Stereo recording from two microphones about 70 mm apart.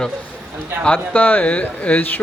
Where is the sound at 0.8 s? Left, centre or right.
Left.